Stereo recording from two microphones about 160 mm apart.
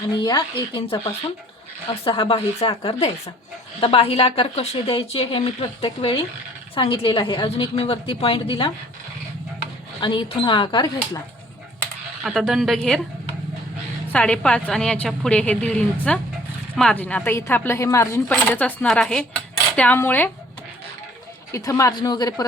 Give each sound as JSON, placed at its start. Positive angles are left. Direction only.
{"t": 0.1, "sound": "a woman's voice", "side_deg": 25}
{"t": 10.0, "sound": "speech", "side_deg": 30}
{"t": 12.2, "sound": "a woman's voice", "side_deg": 0}
{"t": 14.1, "sound": "a woman's voice", "side_deg": 10}
{"t": 18.3, "sound": "a woman's voice", "side_deg": 10}
{"t": 21.5, "sound": "speech", "side_deg": 20}